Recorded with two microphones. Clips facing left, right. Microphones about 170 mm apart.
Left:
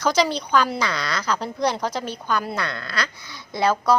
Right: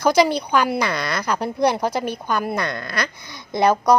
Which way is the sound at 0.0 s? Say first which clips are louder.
Right 4 dB; 10° right (ahead or behind).